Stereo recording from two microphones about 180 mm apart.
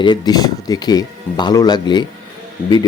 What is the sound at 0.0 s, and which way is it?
Speech, 25° left (ahead or behind).